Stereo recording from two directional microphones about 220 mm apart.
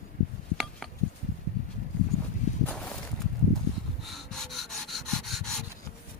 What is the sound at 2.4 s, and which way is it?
Walk, 35° left (ahead or behind).